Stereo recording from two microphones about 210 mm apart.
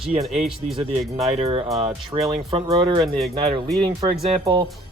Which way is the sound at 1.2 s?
30° right (ahead or behind).